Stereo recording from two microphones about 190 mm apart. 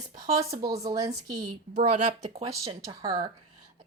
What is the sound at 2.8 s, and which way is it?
Speech, 20° right (ahead or behind).